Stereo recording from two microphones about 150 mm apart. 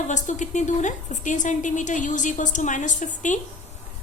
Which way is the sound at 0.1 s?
55° left (ahead or behind).